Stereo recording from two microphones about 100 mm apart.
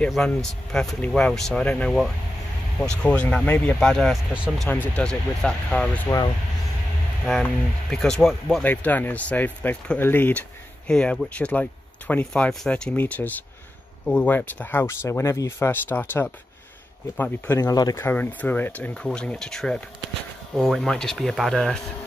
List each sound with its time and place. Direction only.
0.3 s speech: 5° left (ahead or behind)
3.9 s speech: centre (ahead or behind)
4.6 s speech: 20° left (ahead or behind)
5.0 s speech: 10° left (ahead or behind)
6.1 s speech: 25° left (ahead or behind)
7.9 s speech: 5° left (ahead or behind)
8.6 s speech: 15° left (ahead or behind)
10.9 s speech: 10° left (ahead or behind); by 18.0 s 35° left (ahead or behind)
18.0 s speech: 20° left (ahead or behind)